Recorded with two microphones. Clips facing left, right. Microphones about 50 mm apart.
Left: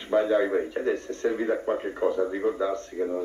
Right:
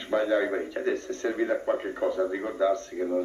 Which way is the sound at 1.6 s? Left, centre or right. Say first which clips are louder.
Left 1 dB; centre.